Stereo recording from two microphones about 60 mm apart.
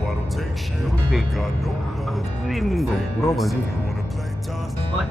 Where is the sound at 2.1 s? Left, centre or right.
Centre.